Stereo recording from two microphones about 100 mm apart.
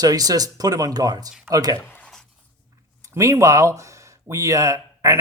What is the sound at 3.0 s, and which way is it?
Speech, 30° right (ahead or behind).